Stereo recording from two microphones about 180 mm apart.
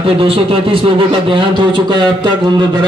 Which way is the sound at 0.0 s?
30° right (ahead or behind).